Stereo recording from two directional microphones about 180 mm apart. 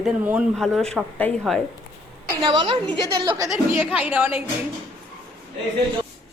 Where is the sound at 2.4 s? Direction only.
25° right (ahead or behind); by 4.4 s 10° right (ahead or behind).